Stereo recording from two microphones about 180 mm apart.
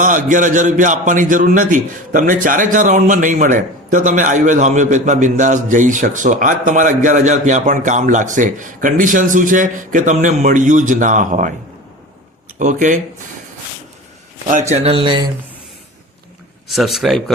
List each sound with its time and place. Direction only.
0.0 s a man's voice: 45° right (ahead or behind)
12.5 s speech: 45° right (ahead or behind)
14.4 s speech: 40° right (ahead or behind)
16.6 s speech: centre (ahead or behind)